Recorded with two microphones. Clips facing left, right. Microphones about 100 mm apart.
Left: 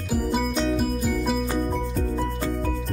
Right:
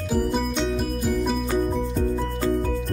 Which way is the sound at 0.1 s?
Centre (ahead or behind).